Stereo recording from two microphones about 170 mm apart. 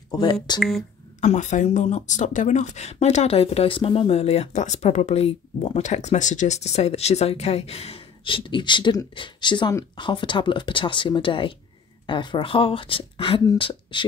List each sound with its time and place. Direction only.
0.2 s speech: 25° left (ahead or behind)
0.6 s speech: centre (ahead or behind)
1.2 s speech: 45° left (ahead or behind)